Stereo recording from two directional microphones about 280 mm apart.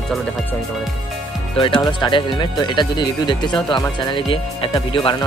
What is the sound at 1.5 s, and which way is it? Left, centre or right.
Speech, centre.